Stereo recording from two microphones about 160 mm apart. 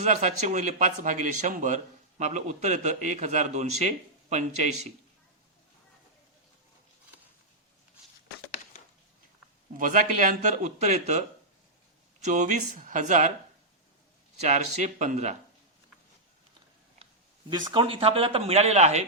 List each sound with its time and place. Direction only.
0.0 s speech: 45° right (ahead or behind)
9.7 s speech: 55° right (ahead or behind)
12.2 s speech: 50° right (ahead or behind)
14.4 s speech: 45° right (ahead or behind)
17.5 s speech: 30° right (ahead or behind); by 19.0 s 45° right (ahead or behind)